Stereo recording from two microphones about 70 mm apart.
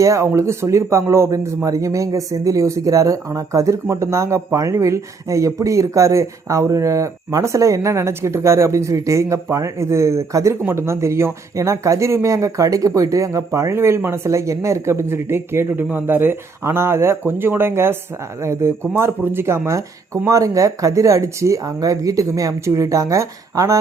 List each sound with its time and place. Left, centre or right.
0.0 s speech: right